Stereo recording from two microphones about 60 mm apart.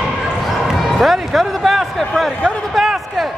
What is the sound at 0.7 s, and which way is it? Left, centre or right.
Music, centre.